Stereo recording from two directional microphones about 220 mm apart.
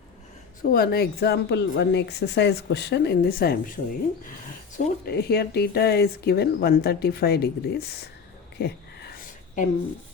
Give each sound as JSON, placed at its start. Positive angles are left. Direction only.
{"t": 0.6, "sound": "speech", "side_deg": 45}
{"t": 4.8, "sound": "speech", "side_deg": 45}
{"t": 8.5, "sound": "a sound", "side_deg": 45}